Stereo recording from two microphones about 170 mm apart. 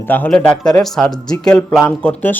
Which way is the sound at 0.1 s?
5° left (ahead or behind).